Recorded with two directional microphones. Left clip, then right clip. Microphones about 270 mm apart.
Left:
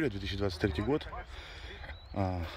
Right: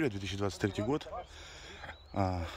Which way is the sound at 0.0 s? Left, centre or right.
Centre.